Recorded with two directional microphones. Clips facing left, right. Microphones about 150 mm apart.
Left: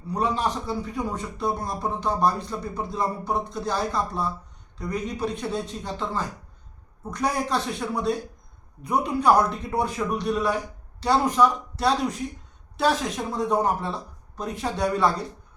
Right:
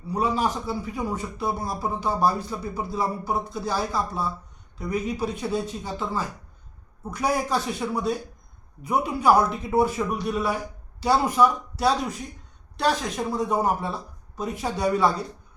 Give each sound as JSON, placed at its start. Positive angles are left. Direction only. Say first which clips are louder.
{"t": 0.1, "sound": "a man's voice", "louder": "right 1 dB", "side_deg": -5}